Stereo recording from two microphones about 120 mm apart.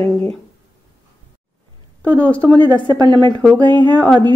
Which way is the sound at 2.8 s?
35° right (ahead or behind).